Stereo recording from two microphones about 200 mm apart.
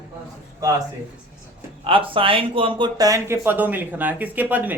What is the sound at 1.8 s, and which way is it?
Speech, 25° right (ahead or behind).